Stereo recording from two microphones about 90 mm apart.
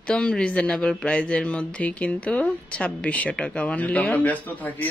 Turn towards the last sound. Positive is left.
turn(degrees=20)  # may be behind; listen again after turning